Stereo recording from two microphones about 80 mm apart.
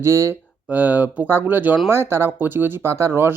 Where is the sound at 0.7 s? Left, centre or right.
Centre.